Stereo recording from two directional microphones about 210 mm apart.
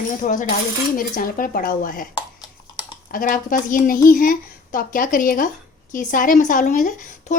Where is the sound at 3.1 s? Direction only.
40° left (ahead or behind).